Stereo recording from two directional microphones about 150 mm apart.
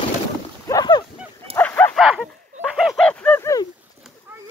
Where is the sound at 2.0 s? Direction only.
Centre (ahead or behind).